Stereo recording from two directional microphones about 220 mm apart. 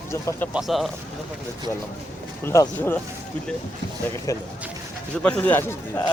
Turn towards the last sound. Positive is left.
turn(degrees=10)  # may be behind; listen again after turning